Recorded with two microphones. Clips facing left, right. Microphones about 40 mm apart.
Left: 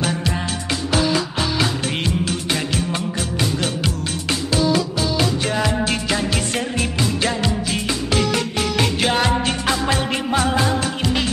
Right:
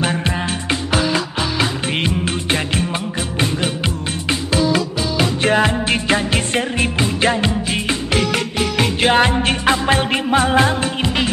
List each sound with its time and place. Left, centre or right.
0.0 s music: right
5.4 s music: right
8.5 s music: centre
9.0 s music: right